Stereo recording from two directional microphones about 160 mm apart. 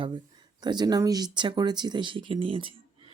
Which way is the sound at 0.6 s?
25° right (ahead or behind).